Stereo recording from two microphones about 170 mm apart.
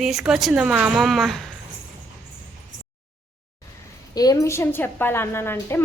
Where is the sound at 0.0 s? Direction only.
Centre (ahead or behind).